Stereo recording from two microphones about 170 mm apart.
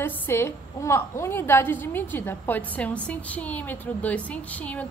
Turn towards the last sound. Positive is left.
turn(degrees=10)  # may be behind; listen again after turning